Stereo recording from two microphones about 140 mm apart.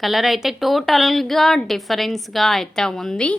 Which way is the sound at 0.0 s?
Centre (ahead or behind).